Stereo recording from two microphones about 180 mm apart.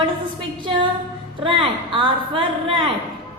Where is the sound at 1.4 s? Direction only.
30° right (ahead or behind).